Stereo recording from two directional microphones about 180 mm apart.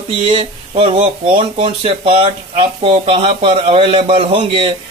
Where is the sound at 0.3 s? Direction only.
30° right (ahead or behind).